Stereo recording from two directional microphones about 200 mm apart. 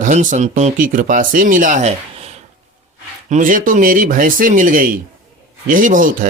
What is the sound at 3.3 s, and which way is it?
Speech, 40° right (ahead or behind).